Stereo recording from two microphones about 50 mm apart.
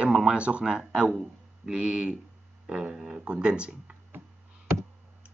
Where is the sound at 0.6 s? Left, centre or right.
Centre.